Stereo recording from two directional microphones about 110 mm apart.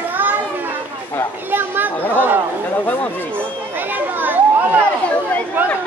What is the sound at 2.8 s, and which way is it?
Speech, 15° left (ahead or behind).